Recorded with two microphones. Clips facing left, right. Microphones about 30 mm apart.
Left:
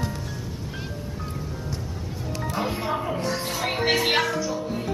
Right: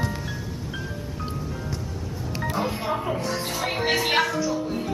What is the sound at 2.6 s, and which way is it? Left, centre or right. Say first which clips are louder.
Music: left 1 dB; centre.